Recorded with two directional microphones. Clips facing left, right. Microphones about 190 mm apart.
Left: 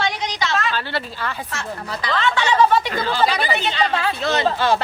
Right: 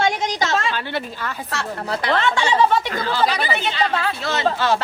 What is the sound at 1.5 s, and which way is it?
Speech, 65° right (ahead or behind).